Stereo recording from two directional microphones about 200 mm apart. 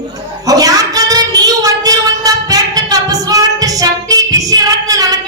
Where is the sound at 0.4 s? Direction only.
15° right (ahead or behind).